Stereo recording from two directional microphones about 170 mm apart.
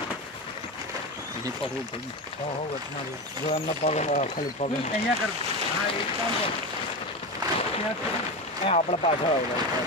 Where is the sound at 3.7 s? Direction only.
40° left (ahead or behind).